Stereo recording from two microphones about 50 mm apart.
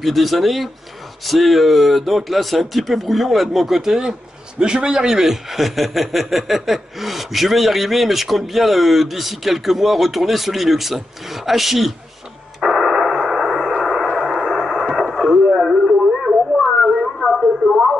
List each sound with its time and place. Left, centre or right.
0.0 s speech: centre
12.5 s radio: centre
16.1 s a sound: centre
16.9 s radio: centre